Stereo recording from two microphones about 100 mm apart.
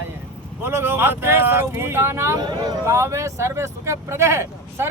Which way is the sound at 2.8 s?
30° right (ahead or behind).